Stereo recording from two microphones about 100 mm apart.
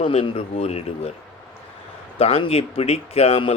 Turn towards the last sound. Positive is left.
turn(degrees=75)  # may be behind; listen again after turning